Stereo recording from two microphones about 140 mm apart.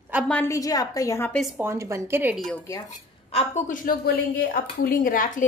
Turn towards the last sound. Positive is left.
turn(degrees=75)  # may be behind; listen again after turning